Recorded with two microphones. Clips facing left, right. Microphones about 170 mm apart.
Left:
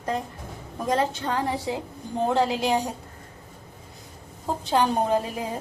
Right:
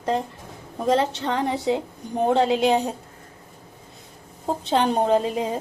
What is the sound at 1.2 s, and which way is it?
A woman's voice, 25° right (ahead or behind).